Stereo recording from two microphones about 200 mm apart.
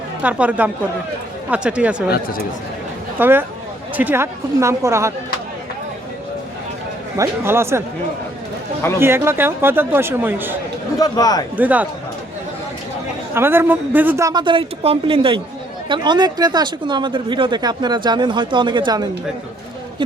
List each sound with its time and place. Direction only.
0.2 s a woman's voice: 5° right (ahead or behind)
3.2 s a woman's voice: 10° right (ahead or behind)
7.2 s a woman's voice: 10° right (ahead or behind)
9.0 s a woman's voice: 10° right (ahead or behind)
11.0 s a man's voice: 20° left (ahead or behind)
11.5 s a woman's voice: 10° right (ahead or behind)
13.3 s a woman's voice: 10° right (ahead or behind)